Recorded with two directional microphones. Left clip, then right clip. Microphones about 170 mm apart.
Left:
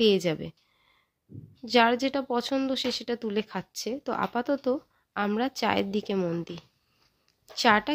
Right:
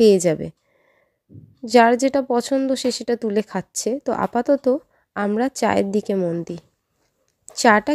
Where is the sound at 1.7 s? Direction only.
40° right (ahead or behind).